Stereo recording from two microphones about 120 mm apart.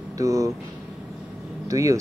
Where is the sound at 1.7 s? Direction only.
25° right (ahead or behind).